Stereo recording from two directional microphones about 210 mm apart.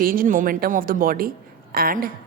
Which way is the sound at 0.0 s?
40° right (ahead or behind).